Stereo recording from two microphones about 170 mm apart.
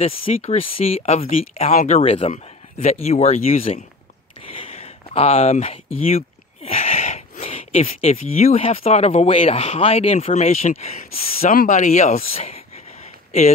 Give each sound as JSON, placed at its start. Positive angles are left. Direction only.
{"t": 0.0, "sound": "speech", "side_deg": 35}
{"t": 4.4, "sound": "a sound", "side_deg": 35}
{"t": 7.4, "sound": "speech", "side_deg": 35}
{"t": 11.5, "sound": "speech", "side_deg": 50}